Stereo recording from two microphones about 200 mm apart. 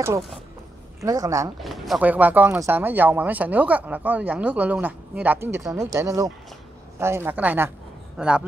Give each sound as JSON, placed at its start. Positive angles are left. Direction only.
{"t": 1.0, "sound": "speech", "side_deg": -15}
{"t": 1.6, "sound": "a man's voice", "side_deg": 0}